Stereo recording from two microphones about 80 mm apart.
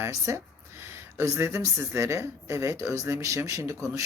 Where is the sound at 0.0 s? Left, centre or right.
Right.